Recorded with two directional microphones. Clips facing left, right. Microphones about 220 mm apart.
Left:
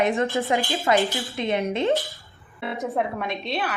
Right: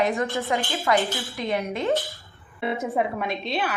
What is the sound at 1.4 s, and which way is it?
Speech, 25° left (ahead or behind).